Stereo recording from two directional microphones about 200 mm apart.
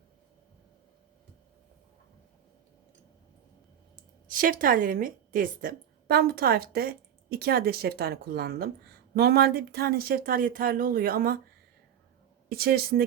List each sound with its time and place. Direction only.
4.3 s speech: 45° right (ahead or behind)
12.5 s speech: 50° right (ahead or behind)